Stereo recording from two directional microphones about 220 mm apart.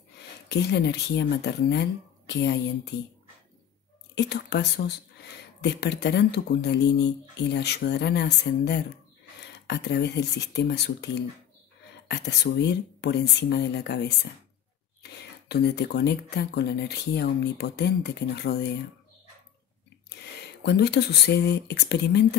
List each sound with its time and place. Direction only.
0.2 s speech: 50° left (ahead or behind)
4.1 s speech: 50° left (ahead or behind)
15.0 s speech: 50° left (ahead or behind)
20.1 s speech: 50° left (ahead or behind)